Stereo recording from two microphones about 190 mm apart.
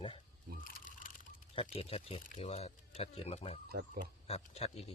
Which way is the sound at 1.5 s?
30° left (ahead or behind).